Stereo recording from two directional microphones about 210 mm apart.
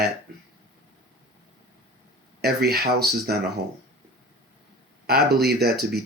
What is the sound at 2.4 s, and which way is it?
Speech, 50° right (ahead or behind).